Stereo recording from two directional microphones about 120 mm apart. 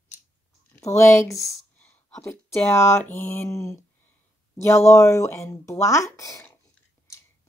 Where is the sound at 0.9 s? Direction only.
25° left (ahead or behind).